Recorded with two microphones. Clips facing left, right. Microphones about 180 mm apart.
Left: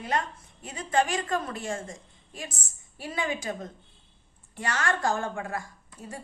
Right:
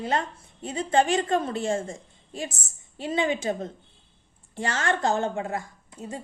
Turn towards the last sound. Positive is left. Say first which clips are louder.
# right 5 dB
turn(degrees=-20)  # may be behind; listen again after turning